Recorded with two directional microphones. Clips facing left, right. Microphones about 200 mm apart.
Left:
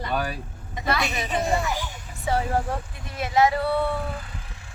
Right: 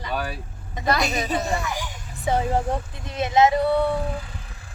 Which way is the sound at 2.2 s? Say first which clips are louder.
Right 2 dB; 20° right (ahead or behind).